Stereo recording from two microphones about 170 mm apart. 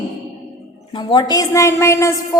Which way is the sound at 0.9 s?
30° left (ahead or behind).